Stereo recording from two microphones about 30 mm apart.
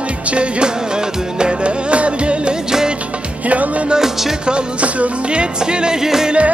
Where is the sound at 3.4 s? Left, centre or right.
Right.